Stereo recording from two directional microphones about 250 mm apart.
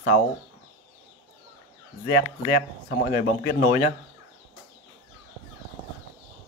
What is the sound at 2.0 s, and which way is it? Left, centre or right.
Speech, left.